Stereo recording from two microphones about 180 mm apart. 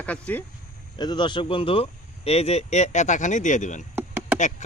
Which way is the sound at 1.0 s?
25° left (ahead or behind).